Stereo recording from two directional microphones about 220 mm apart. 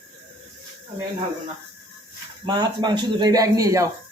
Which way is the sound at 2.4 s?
20° right (ahead or behind).